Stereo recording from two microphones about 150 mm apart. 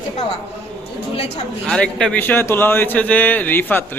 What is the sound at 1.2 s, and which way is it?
Speech, 45° left (ahead or behind).